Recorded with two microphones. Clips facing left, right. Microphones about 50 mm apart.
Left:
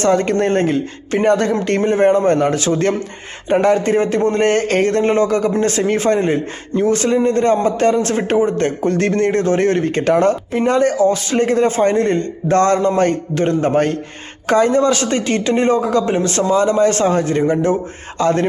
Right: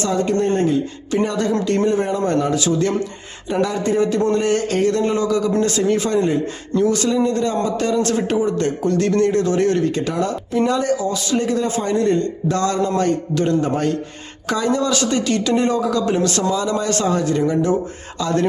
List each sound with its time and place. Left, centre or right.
0.0 s a man's voice: left